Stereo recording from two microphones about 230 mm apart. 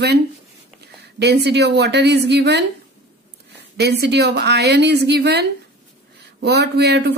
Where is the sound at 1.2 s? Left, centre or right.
Right.